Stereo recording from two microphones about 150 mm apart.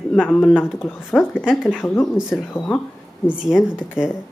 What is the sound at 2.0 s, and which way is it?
A woman's voice, centre (ahead or behind).